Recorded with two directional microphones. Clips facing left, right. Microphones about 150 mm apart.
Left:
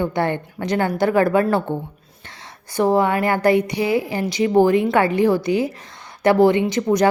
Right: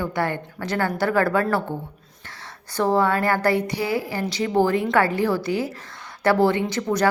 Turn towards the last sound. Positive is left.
turn(degrees=15)  # may be behind; listen again after turning